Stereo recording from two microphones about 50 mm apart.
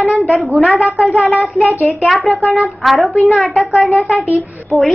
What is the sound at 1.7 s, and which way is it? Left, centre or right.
Speech, left.